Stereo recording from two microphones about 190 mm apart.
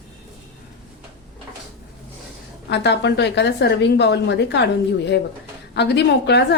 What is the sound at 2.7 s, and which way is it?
A woman's voice, 65° left (ahead or behind).